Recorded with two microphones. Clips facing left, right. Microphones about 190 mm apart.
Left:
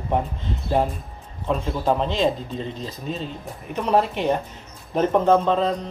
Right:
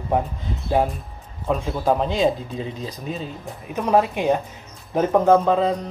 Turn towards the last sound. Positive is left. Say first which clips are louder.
# right 2 dB
turn(degrees=-5)  # may be behind; listen again after turning